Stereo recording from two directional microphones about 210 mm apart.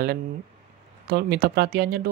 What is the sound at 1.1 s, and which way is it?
Speech, 50° right (ahead or behind).